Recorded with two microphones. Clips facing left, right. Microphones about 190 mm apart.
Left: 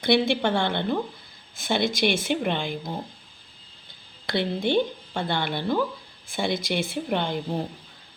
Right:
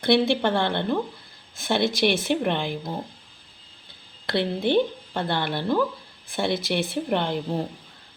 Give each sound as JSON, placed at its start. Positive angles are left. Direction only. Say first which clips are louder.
{"t": 0.0, "sound": "speech", "louder": "right 1 dB", "side_deg": 0}
{"t": 4.3, "sound": "speech", "louder": "right 2 dB", "side_deg": 0}